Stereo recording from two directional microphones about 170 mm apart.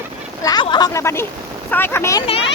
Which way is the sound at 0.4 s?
25° left (ahead or behind).